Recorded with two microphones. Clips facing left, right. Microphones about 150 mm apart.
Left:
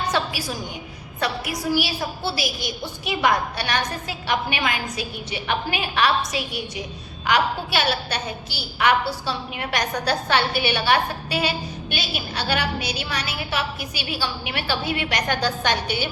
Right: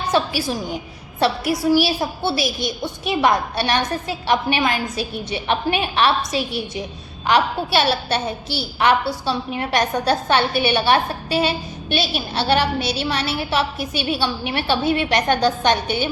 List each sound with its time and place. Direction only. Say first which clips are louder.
0.1 s a woman's voice: right 5 dB; 25° right (ahead or behind)